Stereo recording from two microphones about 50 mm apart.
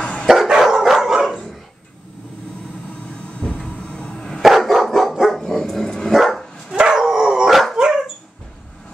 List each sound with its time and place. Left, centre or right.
0.0 s dog: centre
0.5 s dog: centre
1.2 s dog: centre
3.3 s a sound: centre
4.4 s dog: centre
5.9 s dog: centre
6.1 s dog: centre
6.7 s dog: centre